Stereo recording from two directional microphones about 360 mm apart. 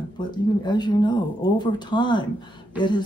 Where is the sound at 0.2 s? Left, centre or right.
Centre.